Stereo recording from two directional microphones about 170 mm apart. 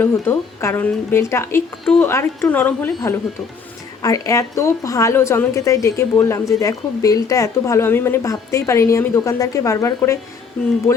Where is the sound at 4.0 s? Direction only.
20° left (ahead or behind).